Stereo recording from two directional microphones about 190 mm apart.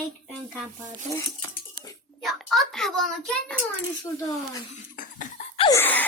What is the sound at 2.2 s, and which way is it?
Speech, centre (ahead or behind).